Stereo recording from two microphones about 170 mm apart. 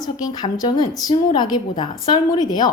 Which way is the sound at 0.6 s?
25° left (ahead or behind).